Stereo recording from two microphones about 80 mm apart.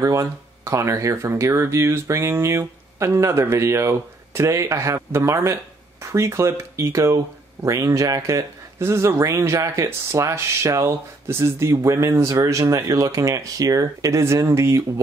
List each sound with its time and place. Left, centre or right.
0.0 s speech: right